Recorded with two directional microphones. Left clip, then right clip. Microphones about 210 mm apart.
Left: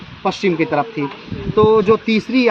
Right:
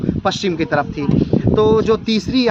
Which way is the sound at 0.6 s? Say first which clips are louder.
Even; 10° right (ahead or behind).